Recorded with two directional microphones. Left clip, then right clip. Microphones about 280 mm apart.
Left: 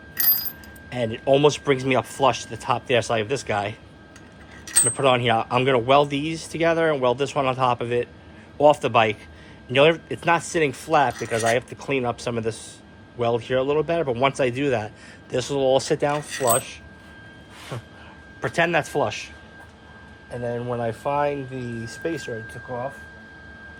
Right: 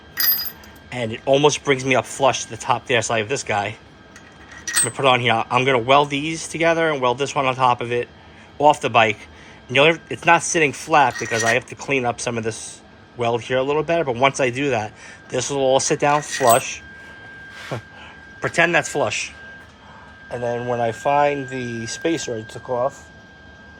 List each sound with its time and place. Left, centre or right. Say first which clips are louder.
0.9 s a man's voice: right 1 dB; centre
4.9 s a man's voice: right 2 dB; centre
17.7 s a man's voice: right 5 dB; centre
20.3 s speech: right 5 dB; centre